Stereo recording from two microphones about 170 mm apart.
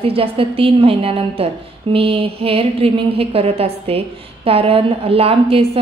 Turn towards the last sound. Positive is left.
turn(degrees=-35)  # may be behind; listen again after turning